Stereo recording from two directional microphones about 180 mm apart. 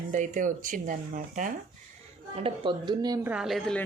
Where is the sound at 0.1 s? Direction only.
45° right (ahead or behind).